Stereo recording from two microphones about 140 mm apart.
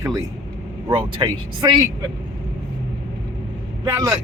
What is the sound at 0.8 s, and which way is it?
Speech, 40° right (ahead or behind).